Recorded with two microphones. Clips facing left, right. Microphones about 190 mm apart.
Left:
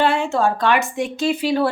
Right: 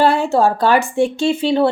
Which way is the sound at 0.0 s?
35° right (ahead or behind).